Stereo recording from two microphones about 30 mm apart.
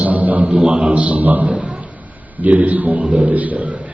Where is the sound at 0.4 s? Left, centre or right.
Right.